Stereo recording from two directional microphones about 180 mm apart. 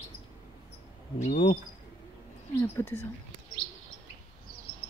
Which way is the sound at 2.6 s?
15° left (ahead or behind).